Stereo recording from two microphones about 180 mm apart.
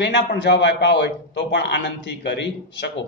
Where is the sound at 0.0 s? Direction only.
75° left (ahead or behind).